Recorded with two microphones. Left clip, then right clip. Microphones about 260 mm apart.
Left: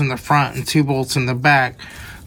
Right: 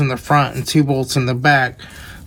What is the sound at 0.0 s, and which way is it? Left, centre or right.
Speech, centre.